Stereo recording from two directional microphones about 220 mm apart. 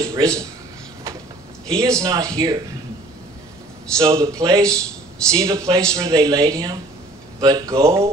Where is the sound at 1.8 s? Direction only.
15° right (ahead or behind).